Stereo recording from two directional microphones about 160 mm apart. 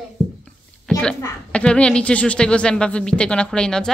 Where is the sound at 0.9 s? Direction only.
5° left (ahead or behind).